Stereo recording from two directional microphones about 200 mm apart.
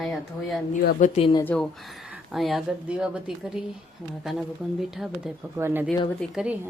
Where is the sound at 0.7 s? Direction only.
40° left (ahead or behind).